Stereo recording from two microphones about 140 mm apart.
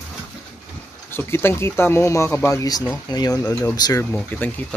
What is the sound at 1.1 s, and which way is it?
Speech, 15° left (ahead or behind).